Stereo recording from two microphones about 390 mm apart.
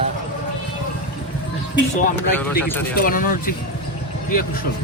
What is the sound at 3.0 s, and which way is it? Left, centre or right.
Speech, left.